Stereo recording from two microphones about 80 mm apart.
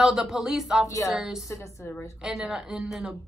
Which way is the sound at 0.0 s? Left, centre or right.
Centre.